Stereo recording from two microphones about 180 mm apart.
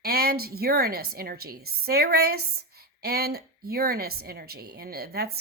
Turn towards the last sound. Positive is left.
turn(degrees=-60)  # may be behind; listen again after turning